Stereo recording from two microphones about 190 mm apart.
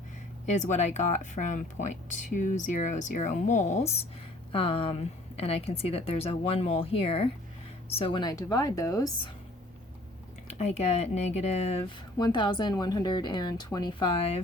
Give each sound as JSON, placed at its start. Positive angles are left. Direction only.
{"t": 0.4, "sound": "speech", "side_deg": 40}
{"t": 10.6, "sound": "speech", "side_deg": 35}